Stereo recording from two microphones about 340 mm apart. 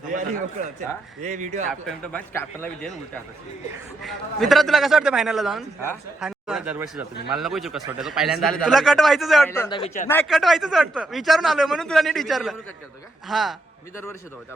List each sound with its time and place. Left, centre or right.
0.1 s a man's voice: right
1.9 s a man's voice: centre
4.0 s a man's voice: centre
10.1 s a man's voice: centre